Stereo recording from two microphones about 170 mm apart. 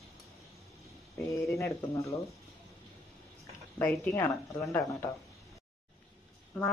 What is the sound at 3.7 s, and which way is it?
Speech, 15° left (ahead or behind).